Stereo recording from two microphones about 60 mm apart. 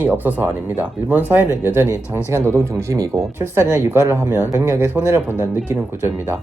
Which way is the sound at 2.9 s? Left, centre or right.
Right.